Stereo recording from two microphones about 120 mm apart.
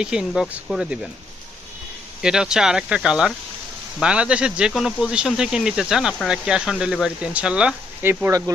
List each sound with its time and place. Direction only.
0.0 s speech: 5° right (ahead or behind)
2.2 s speech: 5° right (ahead or behind)
8.3 s speech: 30° right (ahead or behind)